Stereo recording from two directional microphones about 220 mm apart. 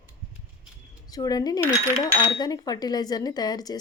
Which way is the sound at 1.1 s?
15° left (ahead or behind).